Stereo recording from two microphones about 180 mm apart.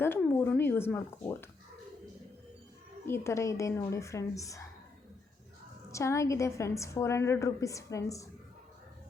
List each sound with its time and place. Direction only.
0.0 s speech: 10° left (ahead or behind)
3.1 s a woman's voice: 15° left (ahead or behind)
5.9 s a woman's voice: 15° left (ahead or behind)